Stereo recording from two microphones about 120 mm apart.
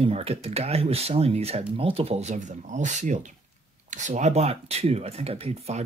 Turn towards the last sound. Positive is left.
turn(degrees=-60)  # may be behind; listen again after turning